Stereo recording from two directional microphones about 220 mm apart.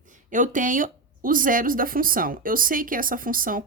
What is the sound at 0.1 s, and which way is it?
Speech, 35° right (ahead or behind).